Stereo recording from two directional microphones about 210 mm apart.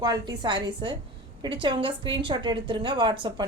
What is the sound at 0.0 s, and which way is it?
A woman's voice, 20° right (ahead or behind).